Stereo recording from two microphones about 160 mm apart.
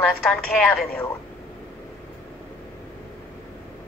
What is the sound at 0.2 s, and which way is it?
Speech, 5° left (ahead or behind).